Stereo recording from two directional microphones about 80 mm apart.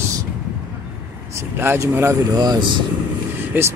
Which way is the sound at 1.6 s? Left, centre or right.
Right.